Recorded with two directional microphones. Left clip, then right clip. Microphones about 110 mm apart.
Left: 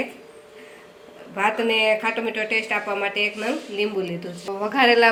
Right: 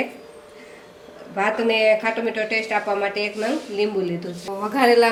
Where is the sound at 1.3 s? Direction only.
20° left (ahead or behind).